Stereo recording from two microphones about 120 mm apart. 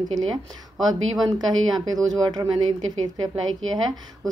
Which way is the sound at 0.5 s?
30° right (ahead or behind).